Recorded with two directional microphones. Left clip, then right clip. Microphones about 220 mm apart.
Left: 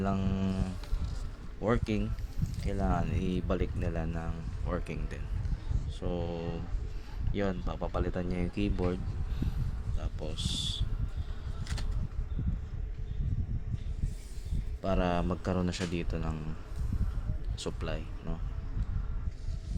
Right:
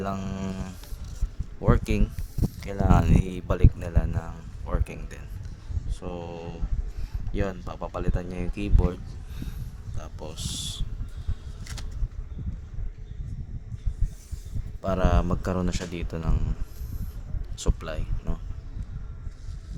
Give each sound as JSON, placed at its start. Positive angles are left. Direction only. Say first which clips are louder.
{"t": 0.0, "sound": "mantra", "louder": "right 2 dB", "side_deg": -20}
{"t": 1.6, "sound": "speech", "louder": "right 4 dB", "side_deg": -25}
{"t": 10.0, "sound": "speech", "louder": "right 1 dB", "side_deg": -20}
{"t": 14.8, "sound": "speech", "louder": "right 4 dB", "side_deg": -15}
{"t": 17.6, "sound": "speech", "louder": "right 4 dB", "side_deg": -15}